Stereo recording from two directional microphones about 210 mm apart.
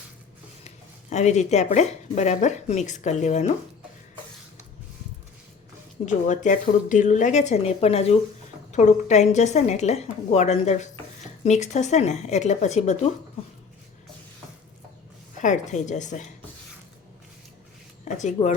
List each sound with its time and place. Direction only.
1.1 s speech: 35° left (ahead or behind)
6.1 s speech: 35° left (ahead or behind)
15.4 s speech: 35° left (ahead or behind)
18.0 s speech: 35° left (ahead or behind)